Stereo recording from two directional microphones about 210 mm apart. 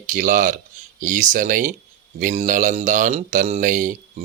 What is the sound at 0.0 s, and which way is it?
A man's voice, 40° right (ahead or behind).